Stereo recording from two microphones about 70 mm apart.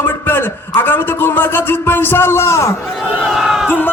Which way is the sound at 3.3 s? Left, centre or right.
Centre.